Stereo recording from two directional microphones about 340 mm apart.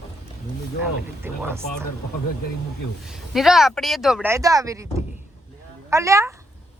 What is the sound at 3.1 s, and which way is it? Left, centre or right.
Speech, centre.